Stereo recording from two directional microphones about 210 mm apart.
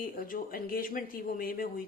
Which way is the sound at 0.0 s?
40° left (ahead or behind).